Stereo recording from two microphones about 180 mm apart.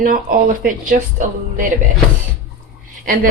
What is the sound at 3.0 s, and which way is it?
Speech, 50° right (ahead or behind).